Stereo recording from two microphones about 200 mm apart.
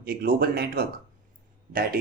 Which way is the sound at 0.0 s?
50° right (ahead or behind).